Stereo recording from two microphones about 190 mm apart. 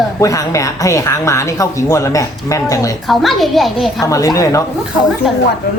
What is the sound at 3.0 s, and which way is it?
Speech, centre (ahead or behind).